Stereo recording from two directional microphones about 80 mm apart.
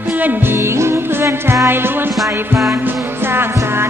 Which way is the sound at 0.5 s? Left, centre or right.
Right.